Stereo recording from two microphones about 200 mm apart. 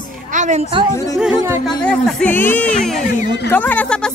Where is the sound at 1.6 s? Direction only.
5° left (ahead or behind).